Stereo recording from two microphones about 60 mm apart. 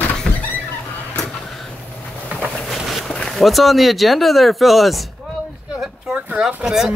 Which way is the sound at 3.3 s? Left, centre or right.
Centre.